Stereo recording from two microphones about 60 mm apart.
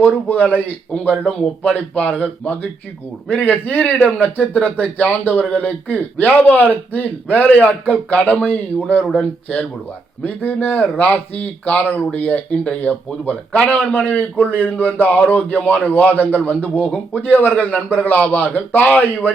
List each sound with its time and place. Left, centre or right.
0.0 s speech: left
17.6 s speech: centre
18.0 s speech: left